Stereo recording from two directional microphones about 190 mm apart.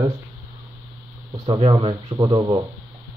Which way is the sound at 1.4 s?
25° right (ahead or behind).